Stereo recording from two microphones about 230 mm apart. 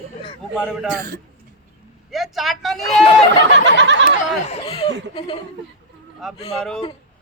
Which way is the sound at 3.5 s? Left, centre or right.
Right.